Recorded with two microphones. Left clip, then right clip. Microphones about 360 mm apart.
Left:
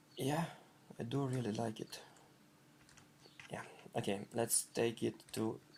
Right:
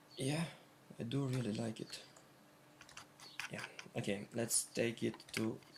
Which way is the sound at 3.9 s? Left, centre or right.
Left.